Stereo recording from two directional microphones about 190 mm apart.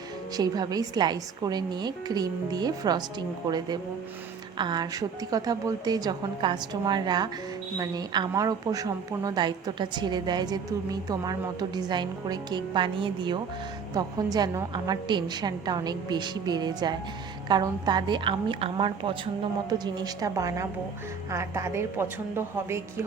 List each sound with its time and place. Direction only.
0.3 s a woman's voice: 20° right (ahead or behind)